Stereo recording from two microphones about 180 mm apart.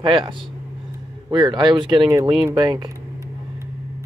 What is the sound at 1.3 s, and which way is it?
Speech, 25° right (ahead or behind).